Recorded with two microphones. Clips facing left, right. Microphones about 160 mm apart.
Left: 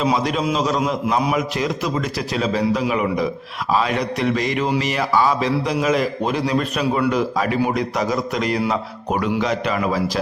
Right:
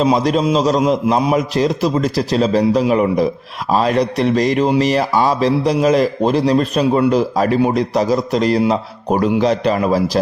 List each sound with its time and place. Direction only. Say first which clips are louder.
0.0 s a man's voice: right 5 dB; 35° right (ahead or behind)